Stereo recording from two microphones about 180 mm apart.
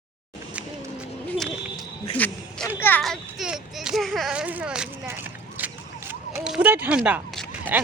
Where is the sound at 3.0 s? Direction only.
Centre (ahead or behind).